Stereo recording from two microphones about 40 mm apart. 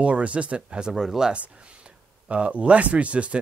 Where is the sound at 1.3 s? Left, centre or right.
Right.